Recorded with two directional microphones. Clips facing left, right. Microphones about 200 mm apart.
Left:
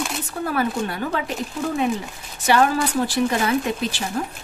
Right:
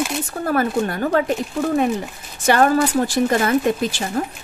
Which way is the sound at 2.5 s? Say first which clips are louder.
Right 3 dB; 50° right (ahead or behind).